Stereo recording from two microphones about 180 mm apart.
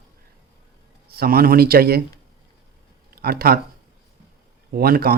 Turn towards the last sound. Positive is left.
turn(degrees=-55)  # may be behind; listen again after turning